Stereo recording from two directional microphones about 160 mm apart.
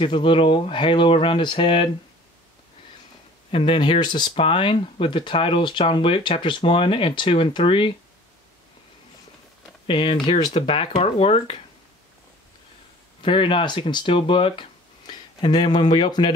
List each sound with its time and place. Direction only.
0.0 s speech: 30° left (ahead or behind)
3.5 s speech: 35° left (ahead or behind)
9.8 s speech: 35° left (ahead or behind)
13.2 s speech: 30° left (ahead or behind)